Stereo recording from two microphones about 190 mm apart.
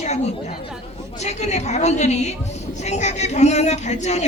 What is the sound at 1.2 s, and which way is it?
A woman's voice, 35° left (ahead or behind).